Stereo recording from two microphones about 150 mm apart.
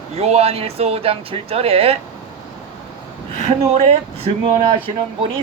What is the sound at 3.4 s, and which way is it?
Speech, 45° right (ahead or behind).